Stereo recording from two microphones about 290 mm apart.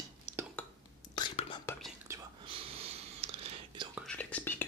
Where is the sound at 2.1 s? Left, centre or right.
Centre.